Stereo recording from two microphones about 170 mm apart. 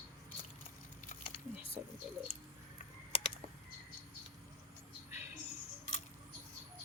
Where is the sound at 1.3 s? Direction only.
35° left (ahead or behind).